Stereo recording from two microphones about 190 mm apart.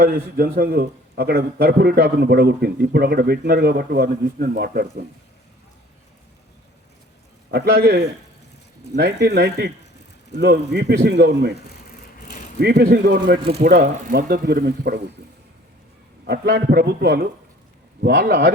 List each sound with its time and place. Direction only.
0.0 s a man's voice: 50° right (ahead or behind)
7.5 s a man's voice: 55° right (ahead or behind)
11.9 s vehicle: 45° left (ahead or behind)
12.5 s a man's voice: 55° right (ahead or behind)
16.2 s a man's voice: 55° right (ahead or behind)